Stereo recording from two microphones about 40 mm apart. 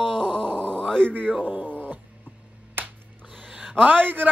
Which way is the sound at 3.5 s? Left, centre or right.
Right.